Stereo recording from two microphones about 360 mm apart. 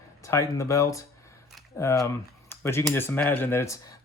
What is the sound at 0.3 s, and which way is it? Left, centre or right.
Speech, centre.